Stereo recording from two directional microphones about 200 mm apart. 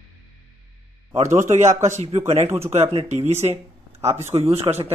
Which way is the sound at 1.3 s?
35° right (ahead or behind).